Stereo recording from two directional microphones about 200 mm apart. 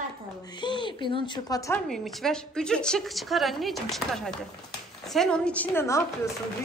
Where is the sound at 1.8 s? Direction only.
Centre (ahead or behind).